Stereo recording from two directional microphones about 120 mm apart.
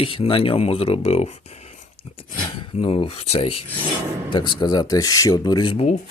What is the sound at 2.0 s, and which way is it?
Speech, 55° left (ahead or behind).